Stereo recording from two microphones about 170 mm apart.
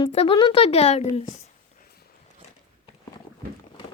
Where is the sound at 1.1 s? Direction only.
40° left (ahead or behind); by 2.1 s 60° left (ahead or behind).